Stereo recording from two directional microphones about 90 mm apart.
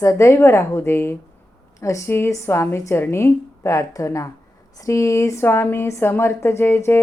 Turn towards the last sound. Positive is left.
turn(degrees=25)  # may be behind; listen again after turning